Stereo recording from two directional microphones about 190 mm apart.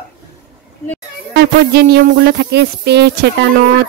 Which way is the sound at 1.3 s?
60° right (ahead or behind).